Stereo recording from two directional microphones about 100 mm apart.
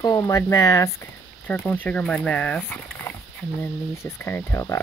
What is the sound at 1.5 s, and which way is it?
Speech, 15° left (ahead or behind).